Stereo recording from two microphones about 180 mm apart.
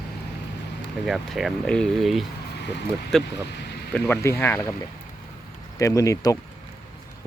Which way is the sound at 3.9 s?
10° left (ahead or behind).